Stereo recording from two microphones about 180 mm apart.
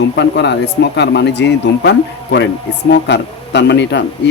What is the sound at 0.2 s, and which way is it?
Speech, 70° left (ahead or behind).